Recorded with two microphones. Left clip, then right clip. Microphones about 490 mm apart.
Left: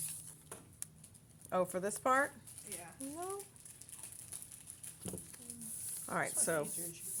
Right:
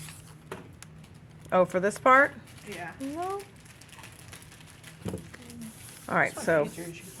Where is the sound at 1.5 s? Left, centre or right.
Left.